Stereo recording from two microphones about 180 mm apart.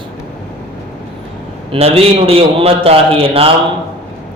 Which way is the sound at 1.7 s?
35° right (ahead or behind).